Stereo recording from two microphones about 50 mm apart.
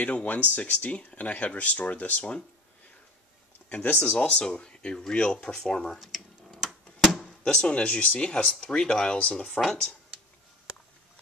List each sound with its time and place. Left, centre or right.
0.0 s speech: left
3.6 s speech: left
6.6 s a sound: centre
7.2 s speech: centre